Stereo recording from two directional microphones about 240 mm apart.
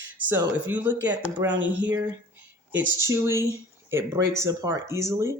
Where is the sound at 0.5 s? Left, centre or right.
Centre.